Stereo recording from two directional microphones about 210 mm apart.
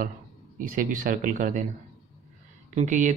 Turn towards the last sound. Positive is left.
turn(degrees=-35)  # may be behind; listen again after turning